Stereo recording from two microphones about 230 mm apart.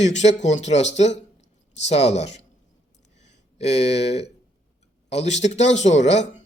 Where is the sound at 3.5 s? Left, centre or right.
Left.